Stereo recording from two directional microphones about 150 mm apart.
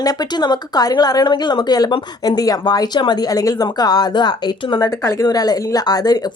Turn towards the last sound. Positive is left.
turn(degrees=25)  # may be behind; listen again after turning